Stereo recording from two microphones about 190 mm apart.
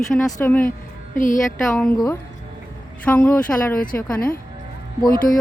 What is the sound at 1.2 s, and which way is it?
Speech, 45° left (ahead or behind).